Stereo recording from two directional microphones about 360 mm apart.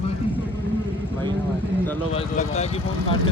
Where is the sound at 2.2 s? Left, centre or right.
Centre.